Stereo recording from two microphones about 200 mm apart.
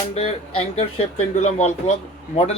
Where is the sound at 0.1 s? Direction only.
30° left (ahead or behind).